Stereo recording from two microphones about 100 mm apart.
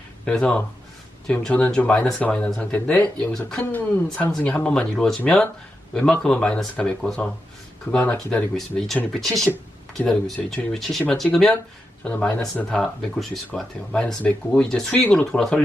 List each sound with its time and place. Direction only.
0.3 s speech: 10° left (ahead or behind)
8.5 s speech: 5° left (ahead or behind)
12.0 s speech: 15° left (ahead or behind)
13.9 s speech: 15° left (ahead or behind)